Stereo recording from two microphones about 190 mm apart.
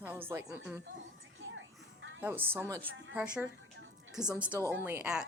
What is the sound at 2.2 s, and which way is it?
Speech, 10° right (ahead or behind).